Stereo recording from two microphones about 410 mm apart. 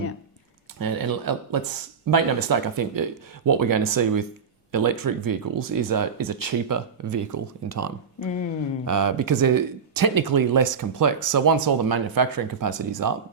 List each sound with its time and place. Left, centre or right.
0.8 s speech: right